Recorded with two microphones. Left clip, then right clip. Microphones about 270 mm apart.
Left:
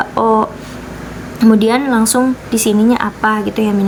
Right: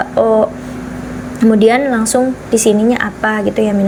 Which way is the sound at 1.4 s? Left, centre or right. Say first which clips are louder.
Right 2 dB; centre.